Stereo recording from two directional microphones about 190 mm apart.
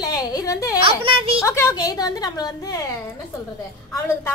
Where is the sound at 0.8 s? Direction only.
30° right (ahead or behind).